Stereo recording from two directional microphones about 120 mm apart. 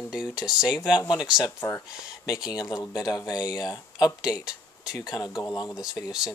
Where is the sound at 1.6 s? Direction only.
25° left (ahead or behind).